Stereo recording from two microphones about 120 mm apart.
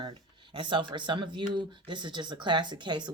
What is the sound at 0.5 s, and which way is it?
Speech, 40° right (ahead or behind).